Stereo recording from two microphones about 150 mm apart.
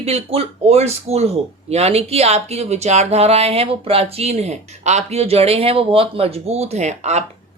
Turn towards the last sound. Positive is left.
turn(degrees=-50)  # may be behind; listen again after turning